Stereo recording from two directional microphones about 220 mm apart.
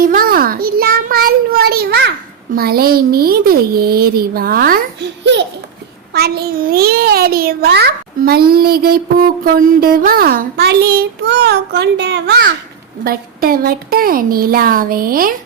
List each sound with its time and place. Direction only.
0.0 s a child's voice: 40° right (ahead or behind)